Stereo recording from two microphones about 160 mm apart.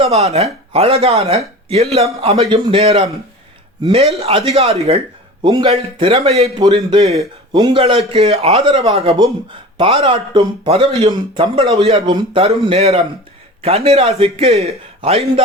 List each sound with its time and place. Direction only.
0.0 s speech: 40° right (ahead or behind)
5.4 s a man's voice: 30° right (ahead or behind)
6.0 s speech: 40° right (ahead or behind)
7.5 s speech: 30° right (ahead or behind)
9.1 s speech: 30° right (ahead or behind)